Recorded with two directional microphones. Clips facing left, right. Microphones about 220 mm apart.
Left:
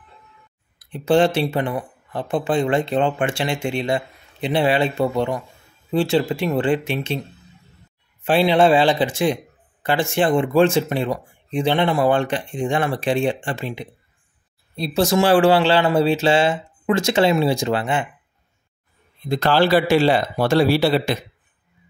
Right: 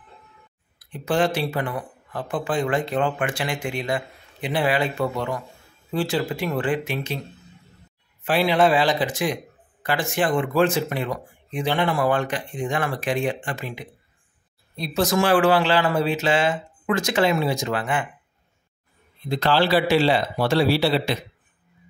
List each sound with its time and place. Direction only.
0.7 s speech: 25° left (ahead or behind)
8.2 s speech: 25° left (ahead or behind)
19.2 s speech: 45° left (ahead or behind)